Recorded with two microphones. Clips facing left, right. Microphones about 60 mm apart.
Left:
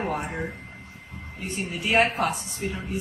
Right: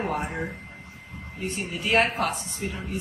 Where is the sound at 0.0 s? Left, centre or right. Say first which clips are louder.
Even; centre.